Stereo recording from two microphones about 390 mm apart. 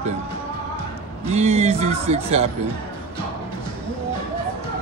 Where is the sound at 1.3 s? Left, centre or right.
Centre.